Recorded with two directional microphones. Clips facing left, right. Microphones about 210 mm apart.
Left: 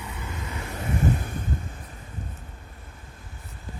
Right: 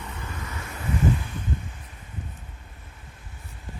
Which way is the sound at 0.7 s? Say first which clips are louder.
Right 1 dB; 45° left (ahead or behind).